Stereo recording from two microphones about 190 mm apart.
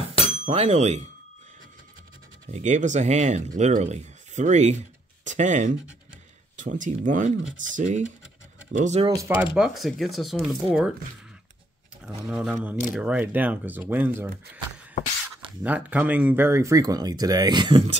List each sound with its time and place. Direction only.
0.5 s speech: 35° right (ahead or behind)
2.5 s speech: 40° right (ahead or behind)
9.0 s speech: 20° right (ahead or behind)
9.4 s speech: centre (ahead or behind)
12.0 s speech: 5° right (ahead or behind)
15.6 s speech: 10° right (ahead or behind); by 17.9 s 25° right (ahead or behind)